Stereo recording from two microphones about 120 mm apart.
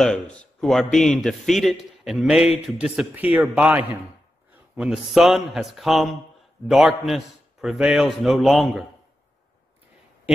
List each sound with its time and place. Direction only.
0.0 s a man's voice: 5° left (ahead or behind)